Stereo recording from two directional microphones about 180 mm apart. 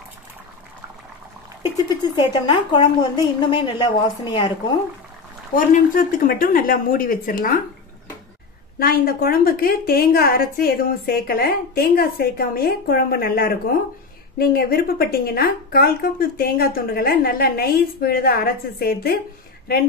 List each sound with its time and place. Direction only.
1.6 s a woman's voice: 25° left (ahead or behind)
5.7 s speech: 50° left (ahead or behind)
8.7 s a woman's voice: 55° left (ahead or behind)